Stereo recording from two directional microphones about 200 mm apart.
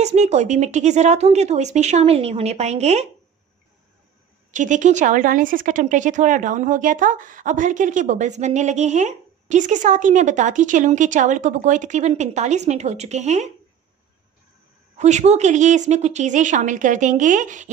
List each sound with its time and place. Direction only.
0.0 s speech: 35° right (ahead or behind)
4.5 s speech: 40° right (ahead or behind)
15.0 s speech: 35° right (ahead or behind)